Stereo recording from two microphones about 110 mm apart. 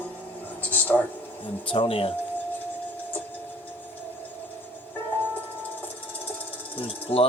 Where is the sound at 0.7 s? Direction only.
15° left (ahead or behind).